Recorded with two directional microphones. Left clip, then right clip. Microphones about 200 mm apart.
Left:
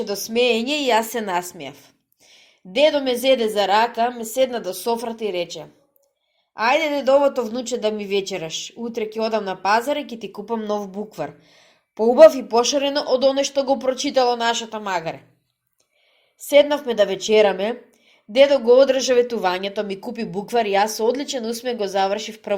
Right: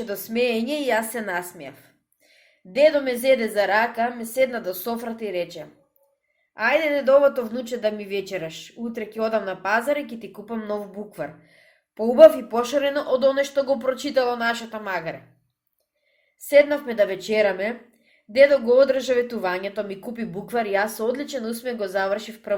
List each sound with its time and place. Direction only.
0.0 s speech: 25° left (ahead or behind)
16.5 s speech: 25° left (ahead or behind)